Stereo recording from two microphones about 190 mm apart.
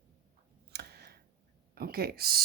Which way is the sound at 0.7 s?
55° right (ahead or behind).